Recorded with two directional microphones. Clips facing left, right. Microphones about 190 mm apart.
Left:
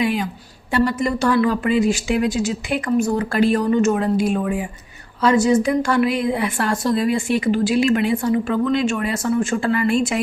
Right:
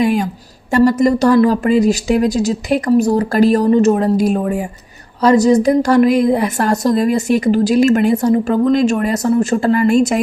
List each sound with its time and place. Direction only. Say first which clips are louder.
0.0 s a woman's voice: right 6 dB; 45° right (ahead or behind)